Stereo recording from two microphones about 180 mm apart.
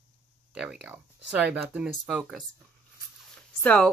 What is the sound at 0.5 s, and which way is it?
Speech, 5° right (ahead or behind).